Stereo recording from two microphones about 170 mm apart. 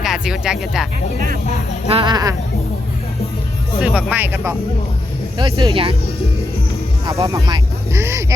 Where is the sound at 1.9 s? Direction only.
25° right (ahead or behind).